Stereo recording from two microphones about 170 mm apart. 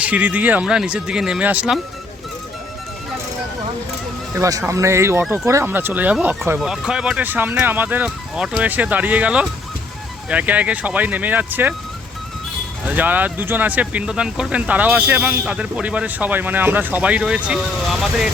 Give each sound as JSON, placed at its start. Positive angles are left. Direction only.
{"t": 0.0, "sound": "speech", "side_deg": -10}
{"t": 4.4, "sound": "speech", "side_deg": -20}
{"t": 12.8, "sound": "speech", "side_deg": -10}